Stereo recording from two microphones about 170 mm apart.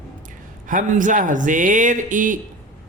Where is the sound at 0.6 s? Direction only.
50° right (ahead or behind).